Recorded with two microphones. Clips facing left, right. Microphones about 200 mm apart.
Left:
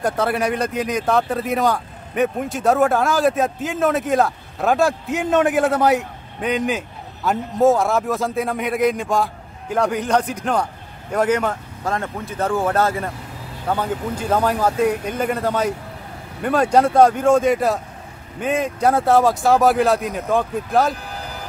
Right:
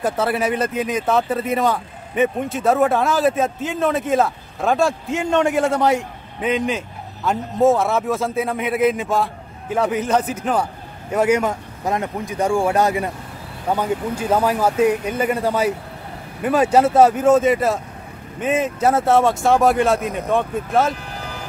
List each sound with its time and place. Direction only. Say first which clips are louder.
0.0 s speech: even; 5° right (ahead or behind)